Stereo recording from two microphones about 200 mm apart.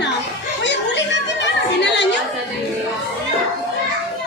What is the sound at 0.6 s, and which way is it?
Chatter, 60° left (ahead or behind).